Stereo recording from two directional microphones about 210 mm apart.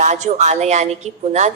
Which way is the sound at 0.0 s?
35° right (ahead or behind).